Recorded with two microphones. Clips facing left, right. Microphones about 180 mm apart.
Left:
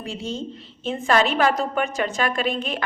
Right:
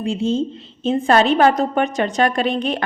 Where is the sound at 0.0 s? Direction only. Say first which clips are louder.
Right 10 dB; 25° right (ahead or behind).